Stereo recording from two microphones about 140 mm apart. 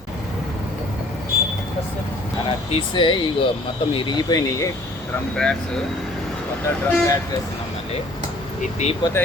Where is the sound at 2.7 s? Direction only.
35° left (ahead or behind).